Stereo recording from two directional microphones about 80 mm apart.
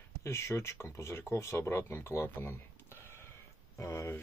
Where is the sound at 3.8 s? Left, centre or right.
Left.